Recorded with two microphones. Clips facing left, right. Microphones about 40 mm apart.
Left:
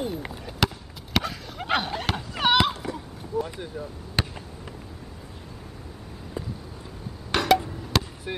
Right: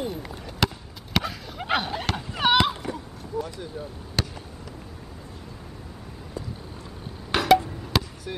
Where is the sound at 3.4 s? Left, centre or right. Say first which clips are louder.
Even; left.